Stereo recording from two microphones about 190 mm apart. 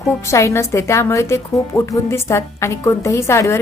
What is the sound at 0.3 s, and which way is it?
Speech, 15° left (ahead or behind).